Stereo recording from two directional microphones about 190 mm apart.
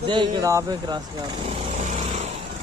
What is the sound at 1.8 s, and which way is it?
Vehicle, 40° right (ahead or behind).